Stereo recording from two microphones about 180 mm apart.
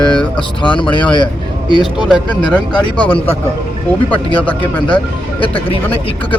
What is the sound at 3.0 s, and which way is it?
Speech, 30° left (ahead or behind).